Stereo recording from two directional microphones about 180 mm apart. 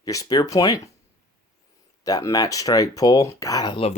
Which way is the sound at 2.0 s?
20° left (ahead or behind).